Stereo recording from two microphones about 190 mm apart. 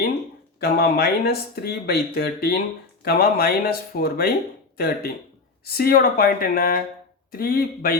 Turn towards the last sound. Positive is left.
turn(degrees=50)  # may be behind; listen again after turning